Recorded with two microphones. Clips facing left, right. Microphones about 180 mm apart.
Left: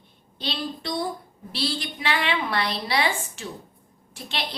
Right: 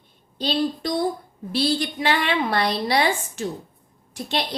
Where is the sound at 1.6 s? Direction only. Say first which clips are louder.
Right 7 dB; 40° right (ahead or behind).